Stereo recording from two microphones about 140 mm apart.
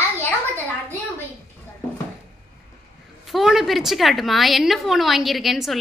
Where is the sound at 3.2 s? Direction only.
Centre (ahead or behind).